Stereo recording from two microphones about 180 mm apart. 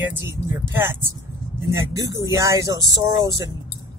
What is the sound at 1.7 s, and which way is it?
Speech, 20° right (ahead or behind).